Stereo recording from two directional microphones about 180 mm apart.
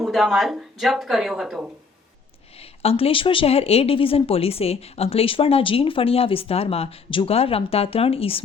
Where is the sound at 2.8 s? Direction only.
35° left (ahead or behind).